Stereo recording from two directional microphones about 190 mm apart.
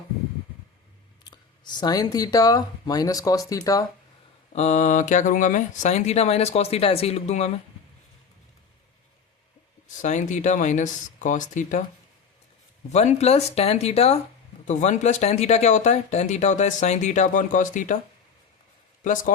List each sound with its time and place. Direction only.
1.2 s speech: 25° left (ahead or behind)
4.5 s speech: 35° left (ahead or behind)
10.0 s speech: 40° left (ahead or behind)
12.9 s speech: 35° left (ahead or behind)
19.0 s speech: 45° left (ahead or behind)